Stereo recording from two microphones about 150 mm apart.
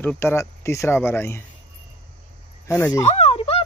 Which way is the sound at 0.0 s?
15° left (ahead or behind).